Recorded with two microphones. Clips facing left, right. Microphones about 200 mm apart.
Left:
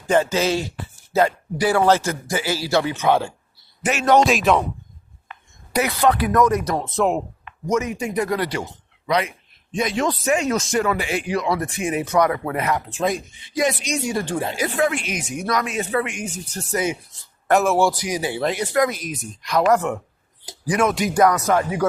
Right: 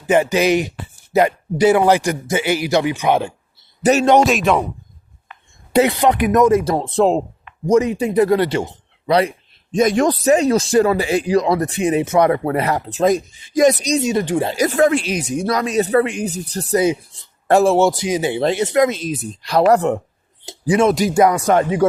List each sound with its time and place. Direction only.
0.1 s a man's voice: 15° right (ahead or behind)
4.3 s speech: centre (ahead or behind)
5.7 s speech: 25° right (ahead or behind)
9.7 s speech: 45° right (ahead or behind)
14.0 s speech: 20° right (ahead or behind)
14.5 s speech: 40° right (ahead or behind)